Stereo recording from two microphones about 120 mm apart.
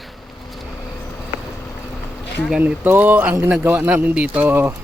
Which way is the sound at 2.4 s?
10° right (ahead or behind).